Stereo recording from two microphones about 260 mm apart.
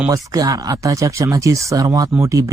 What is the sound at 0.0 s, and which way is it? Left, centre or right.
Speech, centre.